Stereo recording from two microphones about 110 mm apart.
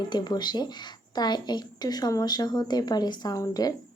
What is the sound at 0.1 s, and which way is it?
A woman's voice, 40° left (ahead or behind).